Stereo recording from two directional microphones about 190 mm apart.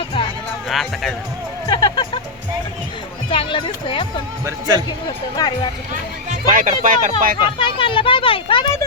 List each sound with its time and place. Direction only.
0.7 s speech: centre (ahead or behind)
1.6 s speech: 25° left (ahead or behind)
3.2 s speech: 25° left (ahead or behind)
4.4 s speech: 20° right (ahead or behind)
5.0 s speech: 25° left (ahead or behind)
6.5 s speech: 45° right (ahead or behind)
7.6 s speech: 25° left (ahead or behind)